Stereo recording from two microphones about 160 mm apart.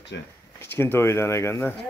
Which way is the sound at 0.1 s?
90° left.